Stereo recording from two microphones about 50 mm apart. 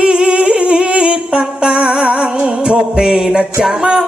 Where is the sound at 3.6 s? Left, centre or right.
Centre.